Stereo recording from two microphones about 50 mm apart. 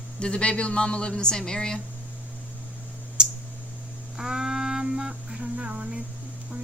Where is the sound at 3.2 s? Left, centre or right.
Centre.